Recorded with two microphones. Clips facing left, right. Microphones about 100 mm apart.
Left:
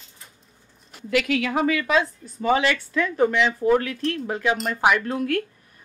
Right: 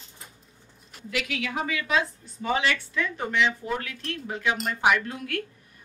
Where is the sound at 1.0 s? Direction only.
55° left (ahead or behind).